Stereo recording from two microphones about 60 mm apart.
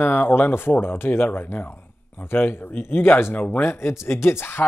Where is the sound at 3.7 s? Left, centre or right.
Left.